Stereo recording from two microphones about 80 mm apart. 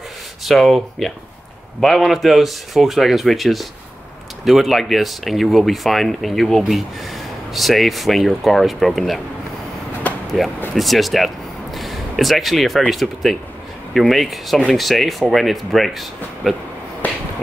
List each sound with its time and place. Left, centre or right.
0.5 s speech: centre
10.4 s speech: centre
17.0 s a sound: centre